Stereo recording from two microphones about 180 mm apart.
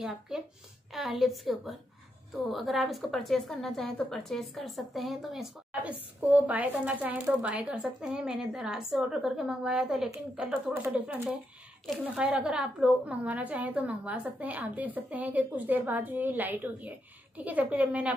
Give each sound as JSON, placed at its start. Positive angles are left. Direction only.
{"t": 0.3, "sound": "a woman's voice", "side_deg": -5}